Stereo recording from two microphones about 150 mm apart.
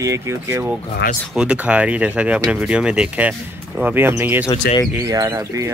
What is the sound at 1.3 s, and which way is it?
Speech, 10° right (ahead or behind).